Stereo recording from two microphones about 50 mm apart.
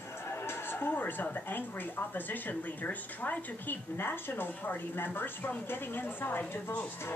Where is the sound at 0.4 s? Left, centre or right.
Left.